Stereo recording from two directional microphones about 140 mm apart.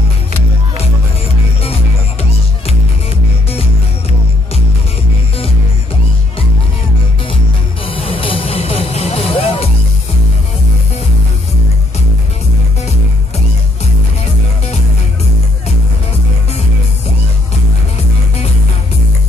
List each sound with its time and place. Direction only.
7.9 s music: 40° left (ahead or behind)